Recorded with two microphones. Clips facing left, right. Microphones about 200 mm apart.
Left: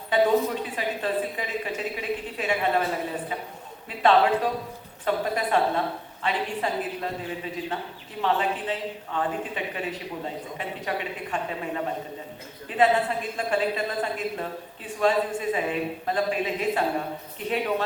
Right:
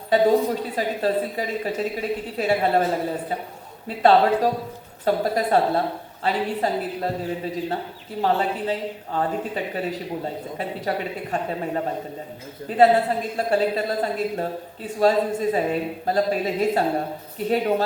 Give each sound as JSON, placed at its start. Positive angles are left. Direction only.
{"t": 0.1, "sound": "a woman's voice", "side_deg": -40}